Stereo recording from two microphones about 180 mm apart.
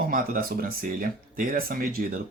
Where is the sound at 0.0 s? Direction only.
55° right (ahead or behind).